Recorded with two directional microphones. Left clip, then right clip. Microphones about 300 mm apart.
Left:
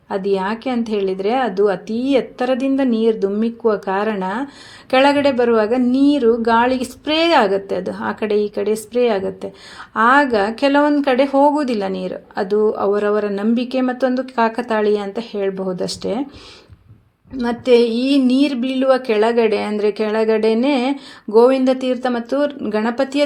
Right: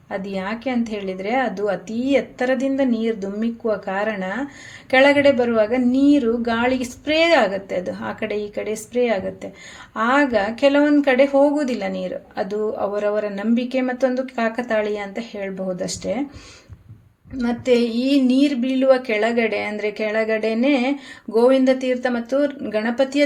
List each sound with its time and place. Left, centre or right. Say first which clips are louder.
0.1 s a woman's voice: left 7 dB; left
17.3 s a woman's voice: left 5 dB; left